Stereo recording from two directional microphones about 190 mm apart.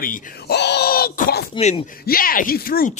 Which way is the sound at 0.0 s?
45° left (ahead or behind).